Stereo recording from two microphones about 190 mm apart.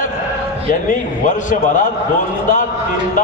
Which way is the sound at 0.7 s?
45° left (ahead or behind).